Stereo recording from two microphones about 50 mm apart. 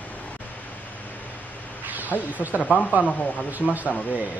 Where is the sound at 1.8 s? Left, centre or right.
Right.